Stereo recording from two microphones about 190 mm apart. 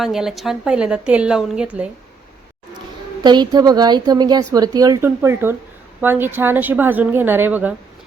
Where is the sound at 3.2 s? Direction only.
20° right (ahead or behind).